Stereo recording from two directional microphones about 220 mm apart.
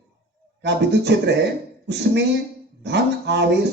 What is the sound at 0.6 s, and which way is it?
Speech, 50° right (ahead or behind).